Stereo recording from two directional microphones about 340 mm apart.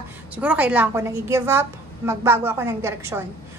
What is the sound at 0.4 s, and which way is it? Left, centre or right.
A woman's voice, centre.